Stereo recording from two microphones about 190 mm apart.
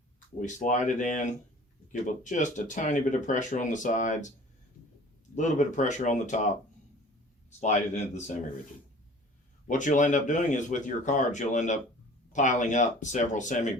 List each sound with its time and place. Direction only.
0.4 s speech: 40° left (ahead or behind)
5.3 s speech: 40° left (ahead or behind)
7.6 s speech: 35° left (ahead or behind)
9.6 s speech: 40° left (ahead or behind)